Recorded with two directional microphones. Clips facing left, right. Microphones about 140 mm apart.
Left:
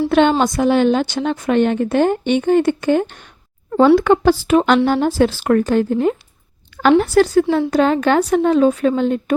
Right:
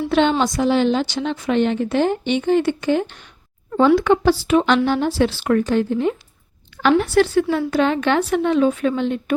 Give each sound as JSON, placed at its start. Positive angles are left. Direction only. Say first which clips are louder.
{"t": 0.1, "sound": "a woman's voice", "louder": "left 1 dB", "side_deg": 50}